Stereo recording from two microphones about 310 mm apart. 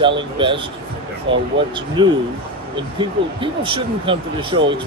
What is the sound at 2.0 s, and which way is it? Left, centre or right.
Speech, centre.